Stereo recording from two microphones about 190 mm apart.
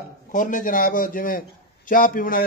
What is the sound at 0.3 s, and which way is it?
A man's voice, 45° left (ahead or behind).